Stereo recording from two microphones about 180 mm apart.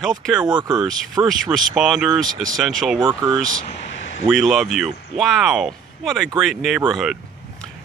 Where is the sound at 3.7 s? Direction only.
40° left (ahead or behind).